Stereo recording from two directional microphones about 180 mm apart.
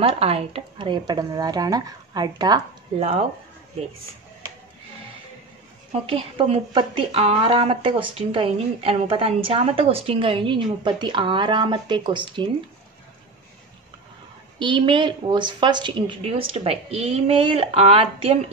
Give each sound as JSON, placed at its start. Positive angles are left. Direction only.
{"t": 0.0, "sound": "speech", "side_deg": -30}
{"t": 6.0, "sound": "speech", "side_deg": -30}
{"t": 14.6, "sound": "speech", "side_deg": -25}